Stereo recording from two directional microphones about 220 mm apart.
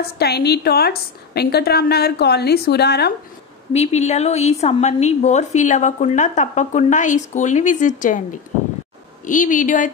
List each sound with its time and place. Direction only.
0.0 s a woman's voice: 45° left (ahead or behind)
3.7 s a woman's voice: 30° left (ahead or behind)
9.2 s a woman's voice: 35° left (ahead or behind)